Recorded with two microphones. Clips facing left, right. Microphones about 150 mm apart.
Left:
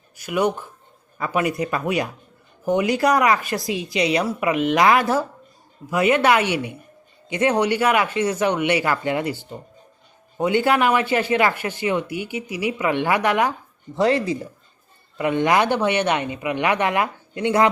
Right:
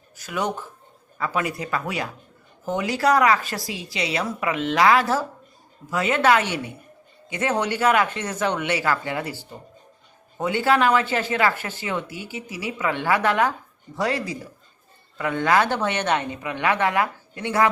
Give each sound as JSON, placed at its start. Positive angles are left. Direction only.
{"t": 0.2, "sound": "a man's voice", "side_deg": 15}